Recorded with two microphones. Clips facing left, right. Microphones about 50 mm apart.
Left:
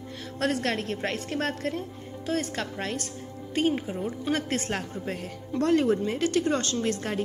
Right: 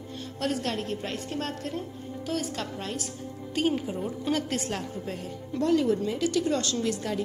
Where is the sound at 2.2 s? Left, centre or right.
Left.